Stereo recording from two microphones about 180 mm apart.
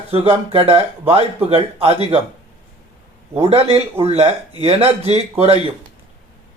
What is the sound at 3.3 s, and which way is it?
Speech, 35° right (ahead or behind).